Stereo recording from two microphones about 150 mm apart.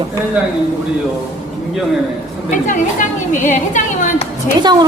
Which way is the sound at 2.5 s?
60° left (ahead or behind).